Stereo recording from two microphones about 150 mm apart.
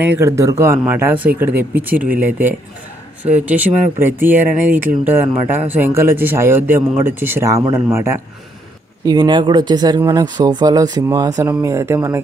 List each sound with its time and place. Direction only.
0.0 s speech: 15° right (ahead or behind)
9.0 s speech: 25° right (ahead or behind)